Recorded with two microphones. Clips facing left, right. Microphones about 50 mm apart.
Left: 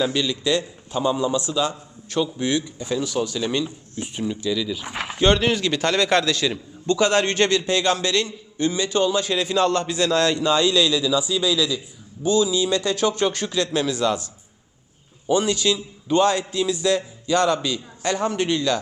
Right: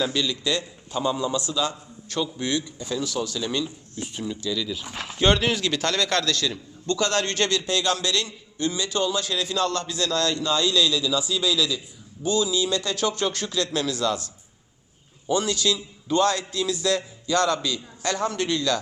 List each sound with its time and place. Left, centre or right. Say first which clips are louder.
0.0 s a man's voice: left 3 dB; left
4.8 s a man's voice: left 5 dB; left
5.2 s a man's voice: left 2 dB; centre
15.3 s a man's voice: left 3 dB; centre